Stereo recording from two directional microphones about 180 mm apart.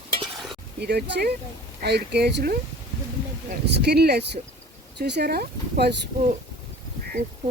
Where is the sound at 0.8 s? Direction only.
65° right (ahead or behind).